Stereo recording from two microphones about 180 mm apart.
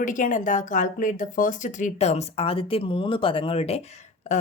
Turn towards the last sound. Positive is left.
turn(degrees=45)  # may be behind; listen again after turning